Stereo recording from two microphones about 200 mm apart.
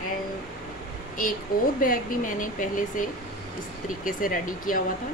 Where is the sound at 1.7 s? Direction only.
45° left (ahead or behind).